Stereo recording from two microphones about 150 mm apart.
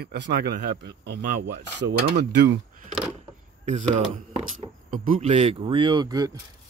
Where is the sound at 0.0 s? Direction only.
90° right.